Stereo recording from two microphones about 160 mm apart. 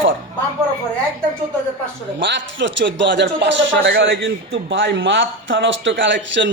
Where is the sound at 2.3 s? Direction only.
90° right.